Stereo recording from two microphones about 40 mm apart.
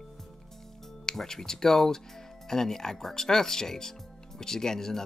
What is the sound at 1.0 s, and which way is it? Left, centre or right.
Speech, centre.